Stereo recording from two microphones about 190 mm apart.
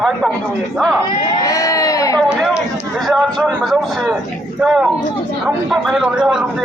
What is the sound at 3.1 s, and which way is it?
A man's voice, centre (ahead or behind).